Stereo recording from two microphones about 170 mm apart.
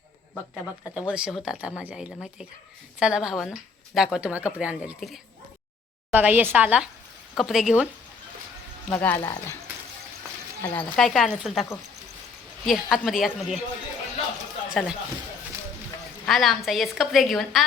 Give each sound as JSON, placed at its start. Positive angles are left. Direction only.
{"t": 0.5, "sound": "a woman's voice", "side_deg": -5}
{"t": 6.1, "sound": "a woman's voice", "side_deg": -10}
{"t": 8.9, "sound": "speech", "side_deg": 10}
{"t": 9.2, "sound": "speech", "side_deg": 20}
{"t": 10.7, "sound": "speech", "side_deg": 5}
{"t": 12.6, "sound": "speech", "side_deg": 0}
{"t": 14.7, "sound": "speech", "side_deg": -5}
{"t": 16.2, "sound": "speech", "side_deg": 0}